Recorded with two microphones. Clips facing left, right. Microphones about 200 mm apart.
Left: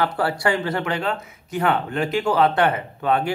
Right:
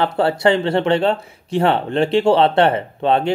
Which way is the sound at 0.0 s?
25° right (ahead or behind).